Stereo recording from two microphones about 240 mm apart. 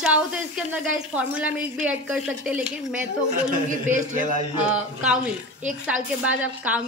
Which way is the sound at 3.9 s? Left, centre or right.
Right.